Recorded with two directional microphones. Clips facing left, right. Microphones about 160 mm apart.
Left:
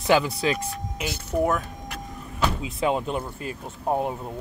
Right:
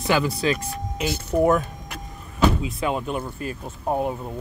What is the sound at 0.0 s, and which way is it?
Speech, 15° left (ahead or behind).